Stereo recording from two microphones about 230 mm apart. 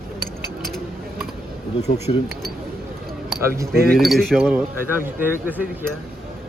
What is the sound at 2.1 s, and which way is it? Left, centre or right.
Speech, left.